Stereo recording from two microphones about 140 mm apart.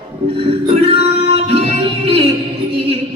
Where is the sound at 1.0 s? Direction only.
45° right (ahead or behind).